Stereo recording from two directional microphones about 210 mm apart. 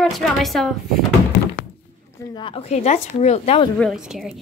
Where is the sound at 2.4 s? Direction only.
25° left (ahead or behind).